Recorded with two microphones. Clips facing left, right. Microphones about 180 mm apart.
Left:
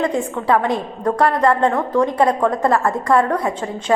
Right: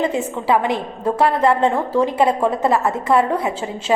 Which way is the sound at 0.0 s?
5° right (ahead or behind).